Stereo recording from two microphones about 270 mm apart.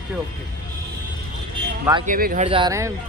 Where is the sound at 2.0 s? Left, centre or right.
Right; by 2.9 s centre.